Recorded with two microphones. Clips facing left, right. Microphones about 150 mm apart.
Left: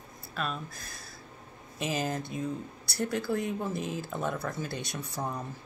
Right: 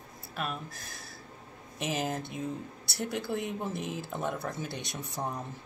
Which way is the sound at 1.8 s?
20° right (ahead or behind).